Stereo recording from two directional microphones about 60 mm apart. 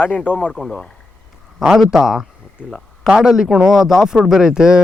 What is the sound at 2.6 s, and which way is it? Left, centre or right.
Speech, left.